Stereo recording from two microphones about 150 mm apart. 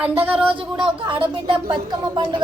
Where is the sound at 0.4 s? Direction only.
35° right (ahead or behind).